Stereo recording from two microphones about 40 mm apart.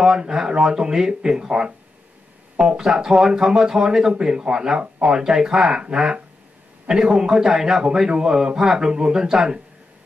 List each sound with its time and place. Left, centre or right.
0.0 s a man's voice: centre
2.8 s a man's voice: centre